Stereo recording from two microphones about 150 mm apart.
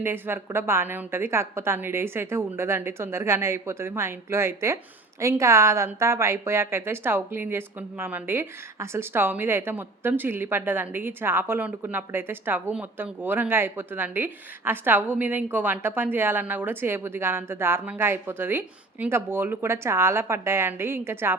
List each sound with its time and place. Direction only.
0.0 s a woman's voice: 15° right (ahead or behind)